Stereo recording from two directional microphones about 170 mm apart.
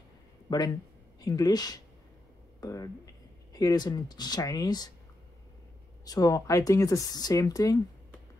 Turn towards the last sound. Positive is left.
turn(degrees=20)  # may be behind; listen again after turning